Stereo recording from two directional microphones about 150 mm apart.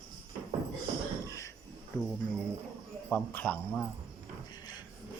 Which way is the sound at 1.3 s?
20° left (ahead or behind).